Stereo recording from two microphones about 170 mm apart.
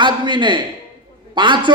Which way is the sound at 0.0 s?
25° right (ahead or behind).